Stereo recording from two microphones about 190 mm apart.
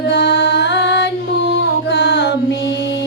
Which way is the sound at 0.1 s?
65° left (ahead or behind).